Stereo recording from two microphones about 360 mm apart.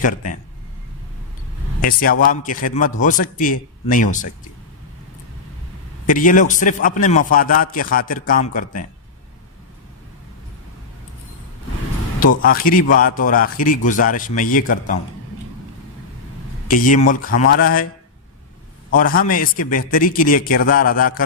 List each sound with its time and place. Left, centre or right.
0.0 s a man's voice: left
1.8 s a man's voice: left
6.1 s a man's voice: left
12.2 s a man's voice: left
16.6 s a man's voice: left
18.9 s a man's voice: left